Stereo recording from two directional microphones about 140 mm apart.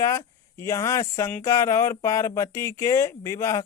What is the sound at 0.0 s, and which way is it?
Speech, 20° left (ahead or behind).